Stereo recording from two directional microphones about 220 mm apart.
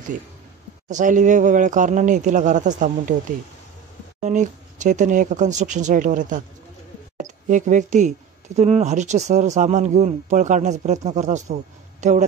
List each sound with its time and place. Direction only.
0.8 s speech: 35° right (ahead or behind)
4.2 s speech: 35° right (ahead or behind)